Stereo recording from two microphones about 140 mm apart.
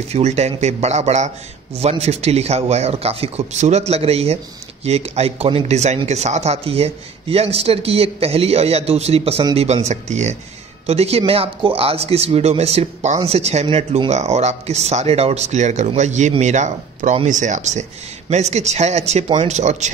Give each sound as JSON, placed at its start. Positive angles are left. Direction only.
{"t": 0.1, "sound": "speech", "side_deg": -50}